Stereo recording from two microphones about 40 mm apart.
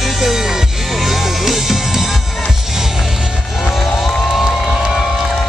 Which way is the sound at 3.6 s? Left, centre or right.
Centre.